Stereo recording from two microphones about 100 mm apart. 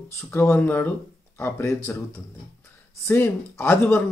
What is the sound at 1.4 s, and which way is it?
Speech, 30° left (ahead or behind).